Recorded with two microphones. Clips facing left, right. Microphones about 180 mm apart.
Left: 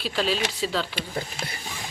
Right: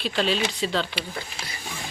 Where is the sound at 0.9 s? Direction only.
45° left (ahead or behind).